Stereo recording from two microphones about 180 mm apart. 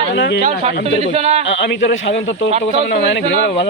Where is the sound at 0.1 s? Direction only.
90° left.